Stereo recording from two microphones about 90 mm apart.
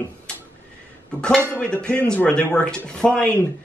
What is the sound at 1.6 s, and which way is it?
Speech, 10° left (ahead or behind).